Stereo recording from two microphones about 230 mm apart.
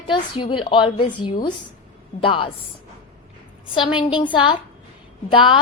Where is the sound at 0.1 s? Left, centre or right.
Left.